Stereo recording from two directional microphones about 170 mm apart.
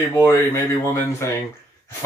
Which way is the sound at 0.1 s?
15° left (ahead or behind).